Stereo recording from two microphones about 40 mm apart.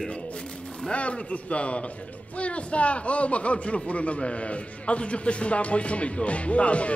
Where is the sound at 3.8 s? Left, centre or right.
Left.